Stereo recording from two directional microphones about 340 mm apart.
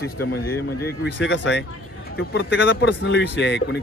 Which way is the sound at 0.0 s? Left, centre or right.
Left.